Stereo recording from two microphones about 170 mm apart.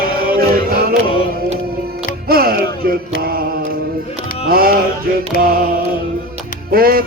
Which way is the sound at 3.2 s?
60° right (ahead or behind).